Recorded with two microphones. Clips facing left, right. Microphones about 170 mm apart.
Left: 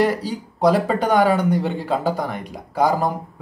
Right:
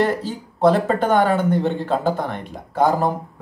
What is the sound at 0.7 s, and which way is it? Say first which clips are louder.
A man's voice: right 1 dB; 5° left (ahead or behind).